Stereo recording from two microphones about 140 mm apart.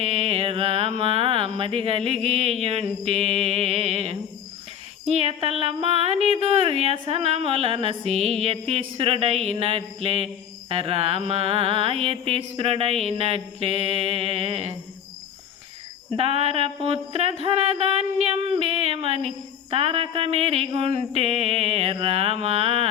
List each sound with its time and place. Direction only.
0.0 s speech: 50° right (ahead or behind)
16.1 s speech: 45° right (ahead or behind)